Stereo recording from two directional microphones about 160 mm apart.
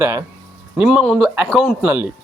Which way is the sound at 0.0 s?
20° right (ahead or behind).